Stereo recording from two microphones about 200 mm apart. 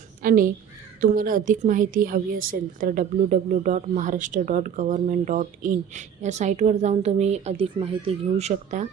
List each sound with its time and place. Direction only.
0.2 s a woman's voice: 45° right (ahead or behind)